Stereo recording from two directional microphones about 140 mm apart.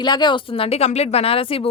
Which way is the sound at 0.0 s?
30° left (ahead or behind).